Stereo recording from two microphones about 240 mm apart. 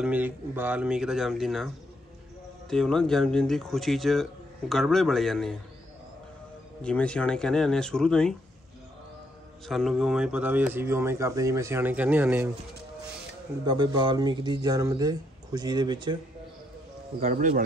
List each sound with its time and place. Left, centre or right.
0.0 s speech: centre
2.7 s speech: centre
6.8 s speech: centre
9.7 s speech: centre
13.7 s speech: centre
17.2 s speech: right